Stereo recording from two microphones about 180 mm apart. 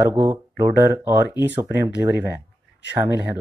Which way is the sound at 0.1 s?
10° right (ahead or behind).